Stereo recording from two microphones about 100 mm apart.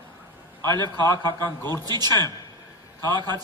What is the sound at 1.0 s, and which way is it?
Speech, 30° left (ahead or behind).